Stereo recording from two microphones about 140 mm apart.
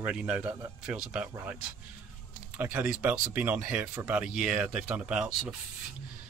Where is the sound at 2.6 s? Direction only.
15° right (ahead or behind).